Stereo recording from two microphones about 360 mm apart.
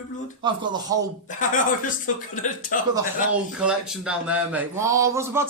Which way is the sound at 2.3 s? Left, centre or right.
Left.